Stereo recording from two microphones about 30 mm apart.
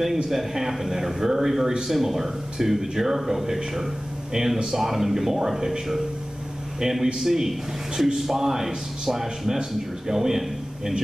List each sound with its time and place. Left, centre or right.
0.3 s speech: centre